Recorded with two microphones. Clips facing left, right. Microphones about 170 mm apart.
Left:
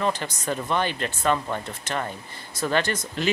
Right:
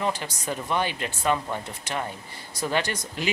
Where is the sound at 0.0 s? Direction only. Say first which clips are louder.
Left 2 dB; 10° right (ahead or behind).